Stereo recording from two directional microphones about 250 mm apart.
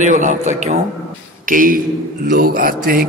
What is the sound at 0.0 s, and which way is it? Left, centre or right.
A man's voice, right.